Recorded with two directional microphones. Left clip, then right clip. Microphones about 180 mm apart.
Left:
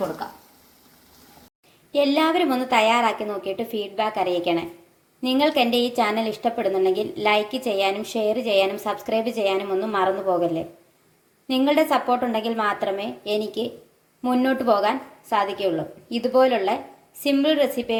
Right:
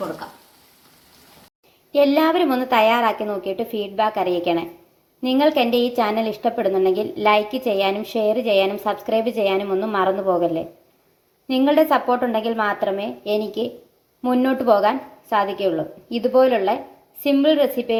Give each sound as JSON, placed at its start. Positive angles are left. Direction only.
{"t": 1.9, "sound": "a woman's voice", "side_deg": 5}